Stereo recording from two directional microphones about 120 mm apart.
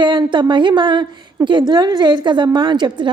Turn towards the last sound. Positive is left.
turn(degrees=-40)  # may be behind; listen again after turning